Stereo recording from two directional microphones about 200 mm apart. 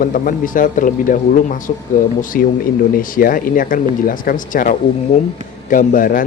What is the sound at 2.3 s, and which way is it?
Speech, 45° left (ahead or behind).